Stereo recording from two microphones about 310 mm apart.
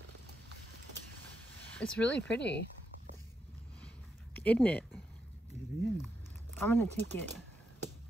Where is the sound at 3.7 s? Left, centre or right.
Centre.